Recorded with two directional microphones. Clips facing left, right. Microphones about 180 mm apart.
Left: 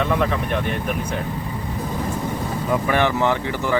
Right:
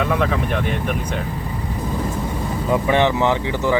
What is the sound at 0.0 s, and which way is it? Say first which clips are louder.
Speech: right 1 dB; centre (ahead or behind).